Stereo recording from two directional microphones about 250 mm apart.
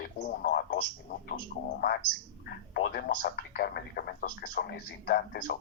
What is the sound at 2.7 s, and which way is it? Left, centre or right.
Speech, left.